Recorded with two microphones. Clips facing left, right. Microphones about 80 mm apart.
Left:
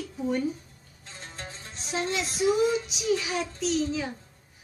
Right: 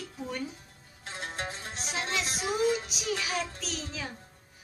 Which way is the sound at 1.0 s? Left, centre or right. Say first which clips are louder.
Right 5 dB; right.